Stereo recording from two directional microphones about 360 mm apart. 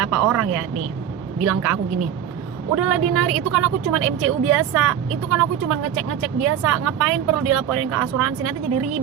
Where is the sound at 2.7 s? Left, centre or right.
Right.